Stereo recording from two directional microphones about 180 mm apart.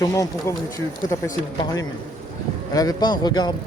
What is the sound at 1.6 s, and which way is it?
Speech, 20° left (ahead or behind).